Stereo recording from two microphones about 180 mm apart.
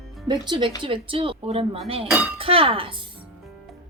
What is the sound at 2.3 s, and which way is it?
Cutlery, 30° right (ahead or behind).